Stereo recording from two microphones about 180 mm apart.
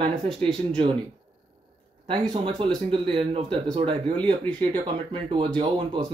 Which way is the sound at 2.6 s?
30° right (ahead or behind).